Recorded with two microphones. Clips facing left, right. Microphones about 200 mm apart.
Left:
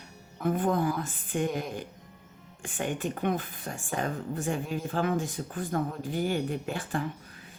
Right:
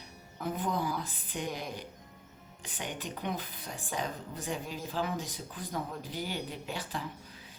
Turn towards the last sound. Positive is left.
turn(degrees=55)  # may be behind; listen again after turning